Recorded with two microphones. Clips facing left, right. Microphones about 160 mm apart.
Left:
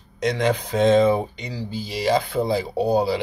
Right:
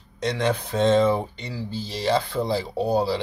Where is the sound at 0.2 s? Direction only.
10° left (ahead or behind).